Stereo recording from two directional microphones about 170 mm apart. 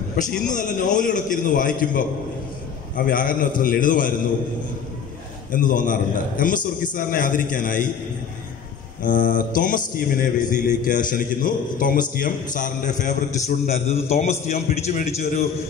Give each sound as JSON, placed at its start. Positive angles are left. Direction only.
{"t": 0.5, "sound": "mantra", "side_deg": 50}
{"t": 3.1, "sound": "mantra", "side_deg": 55}
{"t": 5.5, "sound": "mantra", "side_deg": 50}
{"t": 9.0, "sound": "mantra", "side_deg": 50}
{"t": 14.5, "sound": "a man's voice", "side_deg": 40}